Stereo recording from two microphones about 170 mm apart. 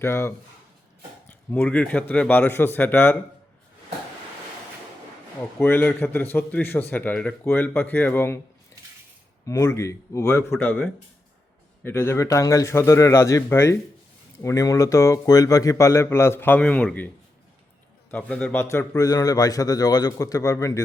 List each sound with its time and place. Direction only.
0.0 s a man's voice: 15° left (ahead or behind)
5.4 s a man's voice: 10° left (ahead or behind)
9.5 s a man's voice: 15° left (ahead or behind)
18.1 s a man's voice: 5° left (ahead or behind)